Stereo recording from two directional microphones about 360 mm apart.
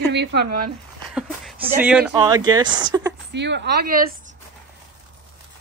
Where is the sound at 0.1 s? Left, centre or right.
Right.